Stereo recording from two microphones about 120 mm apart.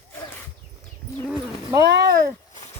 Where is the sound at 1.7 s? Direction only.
30° right (ahead or behind).